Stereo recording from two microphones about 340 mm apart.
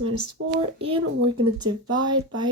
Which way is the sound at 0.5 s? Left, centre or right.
Centre.